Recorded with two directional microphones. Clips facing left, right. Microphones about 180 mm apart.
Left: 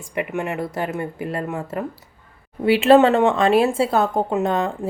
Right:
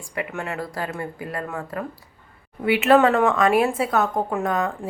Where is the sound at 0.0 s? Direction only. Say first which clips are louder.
Left 4 dB; 20° left (ahead or behind).